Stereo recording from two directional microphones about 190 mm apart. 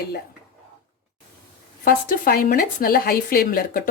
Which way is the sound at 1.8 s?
50° left (ahead or behind).